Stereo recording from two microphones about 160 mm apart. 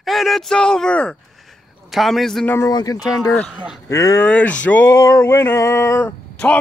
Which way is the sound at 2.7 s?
25° left (ahead or behind).